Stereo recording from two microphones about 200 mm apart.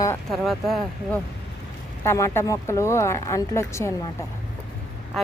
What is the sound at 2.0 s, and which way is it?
Speech, 15° left (ahead or behind).